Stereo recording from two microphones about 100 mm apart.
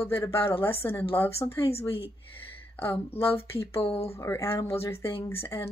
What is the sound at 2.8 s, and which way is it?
Speech, 25° left (ahead or behind).